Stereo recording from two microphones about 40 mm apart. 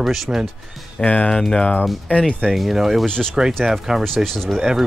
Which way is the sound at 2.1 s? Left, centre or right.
Left.